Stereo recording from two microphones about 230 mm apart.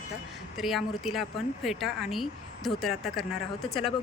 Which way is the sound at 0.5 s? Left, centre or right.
Centre.